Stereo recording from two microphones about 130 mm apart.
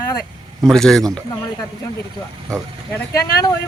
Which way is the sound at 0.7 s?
5° left (ahead or behind).